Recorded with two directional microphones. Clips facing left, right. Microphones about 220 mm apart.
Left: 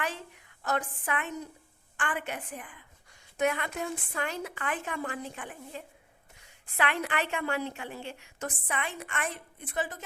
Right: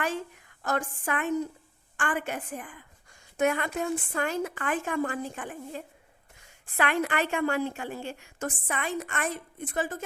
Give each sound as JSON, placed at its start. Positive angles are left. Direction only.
{"t": 0.6, "sound": "a woman's voice", "side_deg": -45}